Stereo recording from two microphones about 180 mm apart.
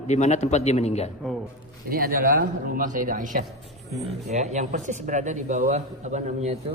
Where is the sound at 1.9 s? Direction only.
55° right (ahead or behind); by 6.6 s 40° right (ahead or behind).